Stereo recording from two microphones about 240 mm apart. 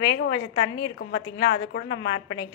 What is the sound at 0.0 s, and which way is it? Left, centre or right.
A woman's voice, left.